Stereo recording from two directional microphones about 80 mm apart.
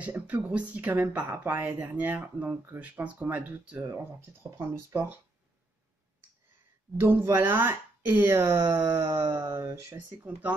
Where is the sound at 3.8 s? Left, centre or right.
Right.